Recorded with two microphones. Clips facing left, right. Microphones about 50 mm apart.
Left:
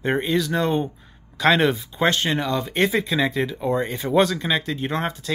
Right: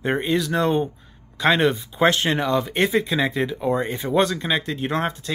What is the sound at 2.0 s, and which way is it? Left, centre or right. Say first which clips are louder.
Speech: right 2 dB; centre.